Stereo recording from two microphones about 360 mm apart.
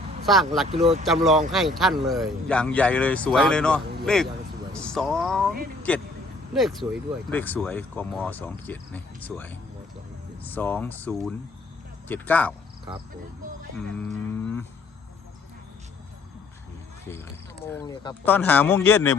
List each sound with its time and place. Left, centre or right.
0.3 s speech: centre
0.7 s speech: centre
1.0 s speech: centre
13.8 s speech: centre
17.1 s speech: centre